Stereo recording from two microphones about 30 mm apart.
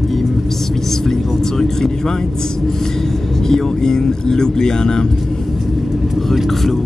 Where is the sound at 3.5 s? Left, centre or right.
Centre.